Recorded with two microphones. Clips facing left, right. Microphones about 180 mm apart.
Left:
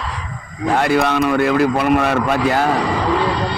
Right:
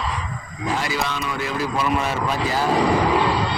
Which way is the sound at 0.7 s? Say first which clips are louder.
Left 9 dB; 60° left (ahead or behind).